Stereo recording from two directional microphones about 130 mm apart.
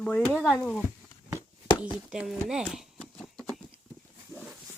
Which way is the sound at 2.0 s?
5° right (ahead or behind).